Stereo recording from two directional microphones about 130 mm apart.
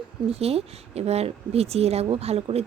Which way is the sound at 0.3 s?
50° right (ahead or behind).